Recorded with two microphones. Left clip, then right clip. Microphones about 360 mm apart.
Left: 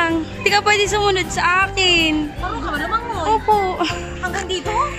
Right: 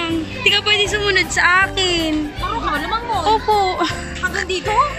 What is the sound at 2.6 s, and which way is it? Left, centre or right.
Music, centre.